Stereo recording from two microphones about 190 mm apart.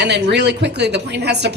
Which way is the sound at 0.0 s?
65° right (ahead or behind).